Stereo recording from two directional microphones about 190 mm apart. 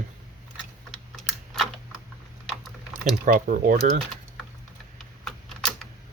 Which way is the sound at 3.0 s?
45° right (ahead or behind).